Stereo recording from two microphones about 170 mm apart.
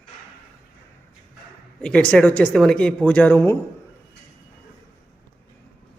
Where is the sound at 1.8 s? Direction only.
5° left (ahead or behind).